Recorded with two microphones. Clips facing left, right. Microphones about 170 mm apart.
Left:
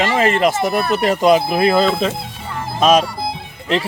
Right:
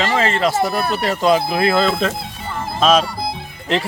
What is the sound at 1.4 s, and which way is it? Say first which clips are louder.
Speech: left 2 dB; centre (ahead or behind).